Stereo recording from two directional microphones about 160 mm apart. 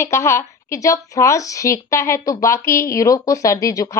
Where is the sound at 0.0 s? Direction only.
15° left (ahead or behind).